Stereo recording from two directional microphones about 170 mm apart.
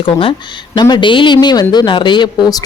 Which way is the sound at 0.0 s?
30° left (ahead or behind).